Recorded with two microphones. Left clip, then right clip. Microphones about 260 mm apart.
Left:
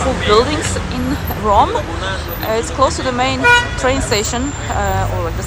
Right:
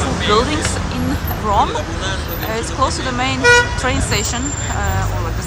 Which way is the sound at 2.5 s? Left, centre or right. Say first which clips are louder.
Left 4 dB; centre.